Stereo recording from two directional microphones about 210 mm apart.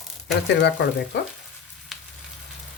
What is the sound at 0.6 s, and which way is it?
Speech, 55° left (ahead or behind).